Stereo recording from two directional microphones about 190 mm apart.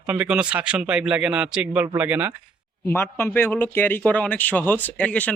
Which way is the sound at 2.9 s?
10° left (ahead or behind).